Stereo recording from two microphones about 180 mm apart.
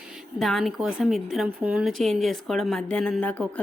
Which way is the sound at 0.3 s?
Centre (ahead or behind).